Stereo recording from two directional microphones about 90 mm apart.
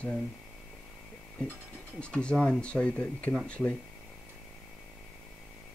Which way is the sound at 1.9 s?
10° left (ahead or behind).